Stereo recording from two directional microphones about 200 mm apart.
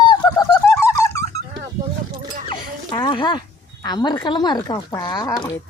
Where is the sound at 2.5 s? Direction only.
25° left (ahead or behind).